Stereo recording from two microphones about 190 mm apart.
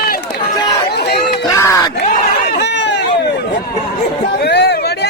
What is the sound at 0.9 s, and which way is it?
Chatter, 55° left (ahead or behind).